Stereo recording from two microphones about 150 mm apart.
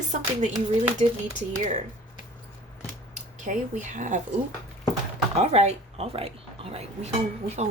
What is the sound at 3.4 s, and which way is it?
Speech, 55° right (ahead or behind).